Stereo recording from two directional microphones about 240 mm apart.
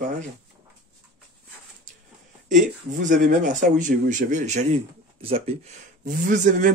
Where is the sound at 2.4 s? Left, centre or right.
Right.